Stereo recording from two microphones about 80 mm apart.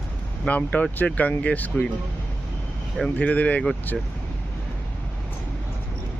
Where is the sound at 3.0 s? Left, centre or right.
Centre.